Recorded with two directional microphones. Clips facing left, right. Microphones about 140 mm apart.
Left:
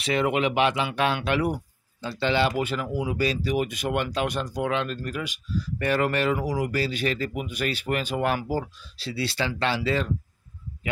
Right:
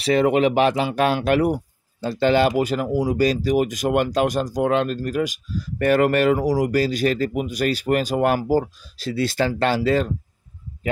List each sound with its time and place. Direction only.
0.0 s speech: 40° right (ahead or behind)